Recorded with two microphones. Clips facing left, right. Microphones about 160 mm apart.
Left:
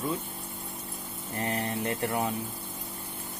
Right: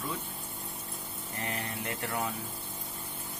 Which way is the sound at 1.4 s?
35° left (ahead or behind).